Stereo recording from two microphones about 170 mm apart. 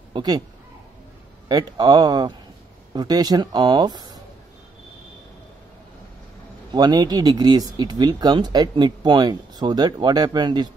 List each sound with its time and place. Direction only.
0.1 s a sound: 25° right (ahead or behind)
1.5 s speech: 25° right (ahead or behind)
6.7 s speech: 25° right (ahead or behind)